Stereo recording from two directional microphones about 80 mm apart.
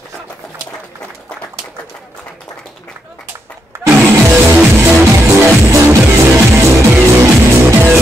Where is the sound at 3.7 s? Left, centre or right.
Right.